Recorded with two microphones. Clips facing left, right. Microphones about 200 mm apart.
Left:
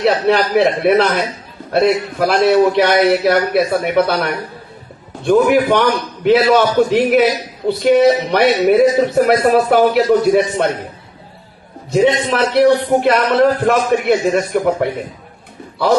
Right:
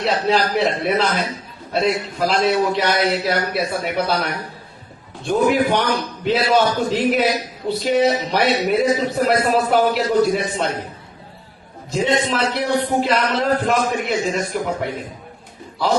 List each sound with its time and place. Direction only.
0.0 s a man's voice: 60° left (ahead or behind)
11.9 s a man's voice: 60° left (ahead or behind)